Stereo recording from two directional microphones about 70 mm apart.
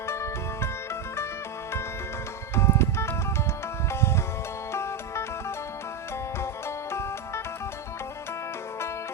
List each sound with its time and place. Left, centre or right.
0.1 s music: left
2.6 s music: left
4.7 s music: left
6.4 s music: left